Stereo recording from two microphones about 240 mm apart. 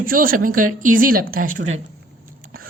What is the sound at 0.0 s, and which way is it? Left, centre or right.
A woman's voice, right.